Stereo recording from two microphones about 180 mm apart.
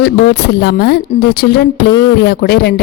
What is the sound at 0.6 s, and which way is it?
Speech, 65° left (ahead or behind).